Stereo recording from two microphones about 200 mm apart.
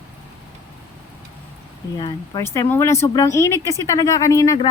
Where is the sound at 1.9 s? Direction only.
20° left (ahead or behind).